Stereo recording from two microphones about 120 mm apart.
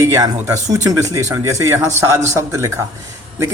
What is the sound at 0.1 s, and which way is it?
Speech, 25° right (ahead or behind).